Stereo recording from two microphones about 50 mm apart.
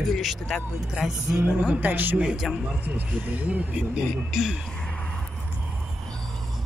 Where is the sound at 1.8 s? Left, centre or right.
Right.